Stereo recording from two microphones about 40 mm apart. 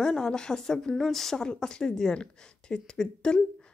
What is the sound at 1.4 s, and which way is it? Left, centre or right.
Speech, centre.